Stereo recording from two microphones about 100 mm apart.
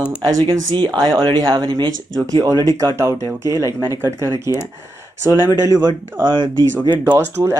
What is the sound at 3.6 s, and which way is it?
Speech, 35° left (ahead or behind).